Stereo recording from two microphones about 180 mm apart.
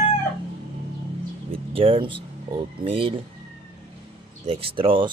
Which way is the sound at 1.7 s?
30° right (ahead or behind).